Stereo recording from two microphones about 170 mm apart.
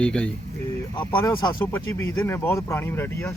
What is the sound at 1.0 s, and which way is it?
Speech, 25° left (ahead or behind).